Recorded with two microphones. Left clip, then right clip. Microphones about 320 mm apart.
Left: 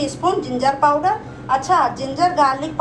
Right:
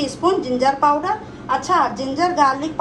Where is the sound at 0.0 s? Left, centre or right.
Right.